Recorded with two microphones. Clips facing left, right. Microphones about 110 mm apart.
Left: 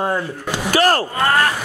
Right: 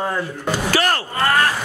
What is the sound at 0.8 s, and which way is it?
Speech, 35° left (ahead or behind).